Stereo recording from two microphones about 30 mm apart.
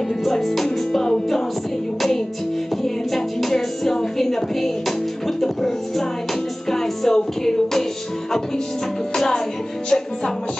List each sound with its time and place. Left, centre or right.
0.2 s music: centre
9.1 s music: centre